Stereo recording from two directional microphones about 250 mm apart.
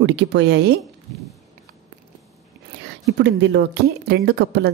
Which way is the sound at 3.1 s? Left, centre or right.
Right.